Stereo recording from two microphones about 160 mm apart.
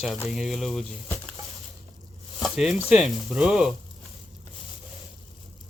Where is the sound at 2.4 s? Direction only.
Centre (ahead or behind).